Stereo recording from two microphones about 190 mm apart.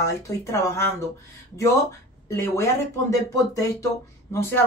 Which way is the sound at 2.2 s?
15° left (ahead or behind).